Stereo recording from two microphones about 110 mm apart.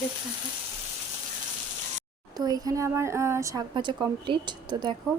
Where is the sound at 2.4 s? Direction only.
35° right (ahead or behind).